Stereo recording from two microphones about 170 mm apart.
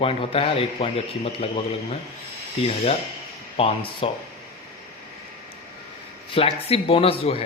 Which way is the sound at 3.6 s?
30° left (ahead or behind).